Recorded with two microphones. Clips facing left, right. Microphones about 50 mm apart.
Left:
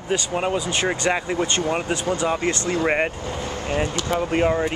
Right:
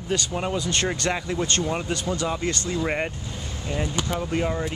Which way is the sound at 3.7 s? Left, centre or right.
Left.